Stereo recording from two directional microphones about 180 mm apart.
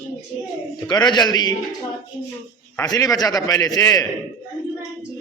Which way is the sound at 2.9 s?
20° left (ahead or behind).